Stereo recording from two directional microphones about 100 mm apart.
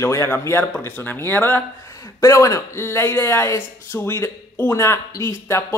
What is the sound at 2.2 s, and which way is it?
A woman's voice, 30° left (ahead or behind).